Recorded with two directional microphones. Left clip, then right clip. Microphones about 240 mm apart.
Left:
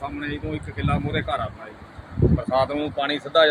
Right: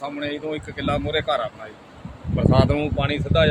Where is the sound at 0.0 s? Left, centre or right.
Right.